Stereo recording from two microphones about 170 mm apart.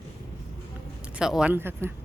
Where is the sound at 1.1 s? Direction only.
5° right (ahead or behind).